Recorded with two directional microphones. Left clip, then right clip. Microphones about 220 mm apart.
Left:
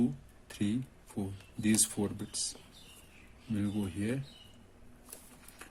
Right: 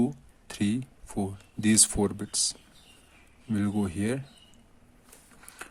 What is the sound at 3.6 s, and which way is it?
Speech, 45° right (ahead or behind).